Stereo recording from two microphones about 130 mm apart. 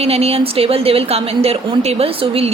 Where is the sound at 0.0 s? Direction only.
50° right (ahead or behind).